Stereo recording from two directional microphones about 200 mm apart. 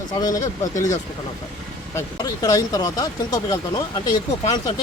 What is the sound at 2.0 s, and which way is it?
Speech, 20° left (ahead or behind).